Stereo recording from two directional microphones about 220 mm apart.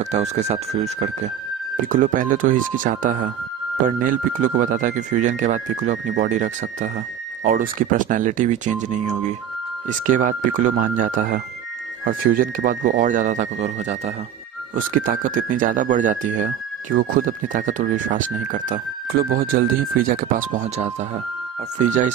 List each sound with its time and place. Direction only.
0.0 s speech: 30° right (ahead or behind)